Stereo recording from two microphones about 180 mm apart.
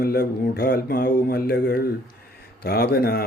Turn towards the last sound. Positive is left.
turn(degrees=60)  # may be behind; listen again after turning